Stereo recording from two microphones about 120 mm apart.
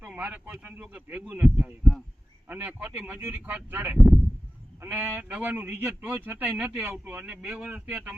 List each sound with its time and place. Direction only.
0.0 s speech: 15° right (ahead or behind)